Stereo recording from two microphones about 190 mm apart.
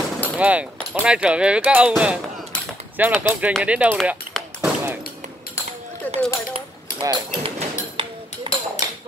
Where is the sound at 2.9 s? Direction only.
10° right (ahead or behind).